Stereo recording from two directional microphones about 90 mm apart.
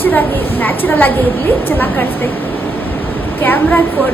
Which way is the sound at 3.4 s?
20° left (ahead or behind).